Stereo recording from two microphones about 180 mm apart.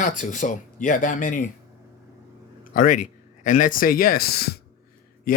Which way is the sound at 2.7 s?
45° left (ahead or behind).